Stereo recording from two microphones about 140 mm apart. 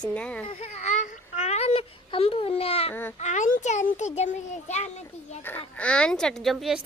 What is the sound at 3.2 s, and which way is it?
A child's voice, 55° left (ahead or behind).